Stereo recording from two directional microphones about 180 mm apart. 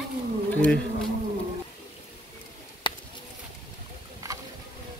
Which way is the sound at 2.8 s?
25° left (ahead or behind).